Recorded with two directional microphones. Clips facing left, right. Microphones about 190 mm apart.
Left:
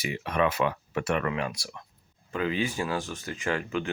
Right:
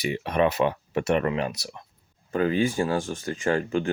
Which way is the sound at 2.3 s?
45° right (ahead or behind).